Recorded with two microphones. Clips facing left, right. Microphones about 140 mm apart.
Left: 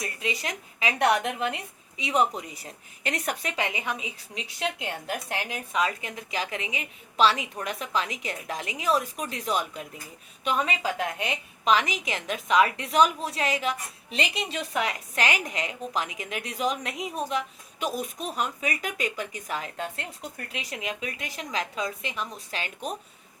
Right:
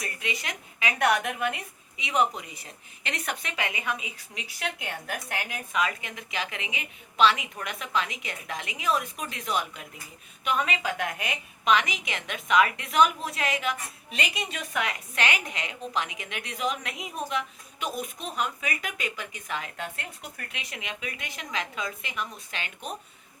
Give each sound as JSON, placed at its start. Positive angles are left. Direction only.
{"t": 0.0, "sound": "a woman's voice", "side_deg": 35}
{"t": 10.8, "sound": "a woman's voice", "side_deg": 30}